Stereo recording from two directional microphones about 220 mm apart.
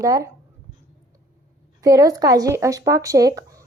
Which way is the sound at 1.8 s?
15° right (ahead or behind).